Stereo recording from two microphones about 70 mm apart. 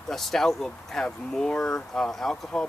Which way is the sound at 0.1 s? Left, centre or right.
Centre.